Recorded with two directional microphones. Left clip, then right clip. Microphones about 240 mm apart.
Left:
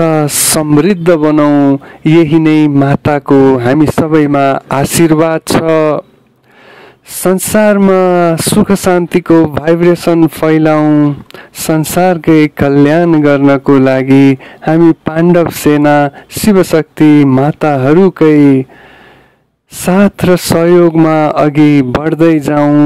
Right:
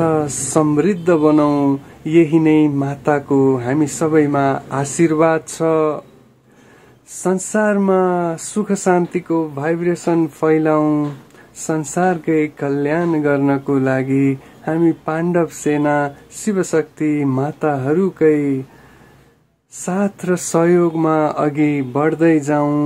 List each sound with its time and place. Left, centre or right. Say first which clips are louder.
0.0 s speech: left 7 dB; left
7.2 s speech: left 9 dB; left
19.8 s speech: left 11 dB; left